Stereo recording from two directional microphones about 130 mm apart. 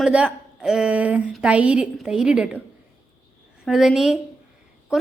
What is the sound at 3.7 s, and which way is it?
Speech, 5° right (ahead or behind).